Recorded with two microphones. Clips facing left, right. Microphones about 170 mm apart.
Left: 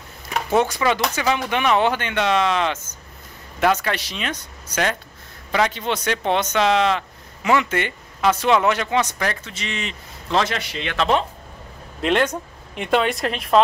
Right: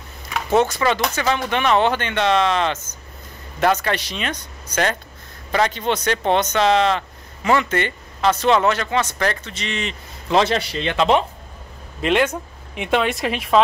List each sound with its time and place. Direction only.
0.6 s speech: 10° left (ahead or behind)
10.3 s a man's voice: 30° right (ahead or behind)
11.0 s speech: 15° right (ahead or behind)
12.0 s speech: 5° right (ahead or behind)